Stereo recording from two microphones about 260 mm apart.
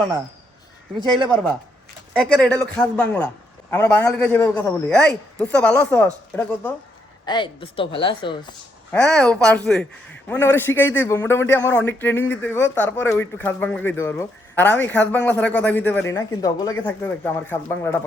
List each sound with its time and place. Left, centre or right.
1.3 s a man's voice: centre
7.3 s speech: centre
8.9 s a man's voice: centre